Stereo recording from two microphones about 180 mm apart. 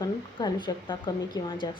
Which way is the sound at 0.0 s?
25° left (ahead or behind).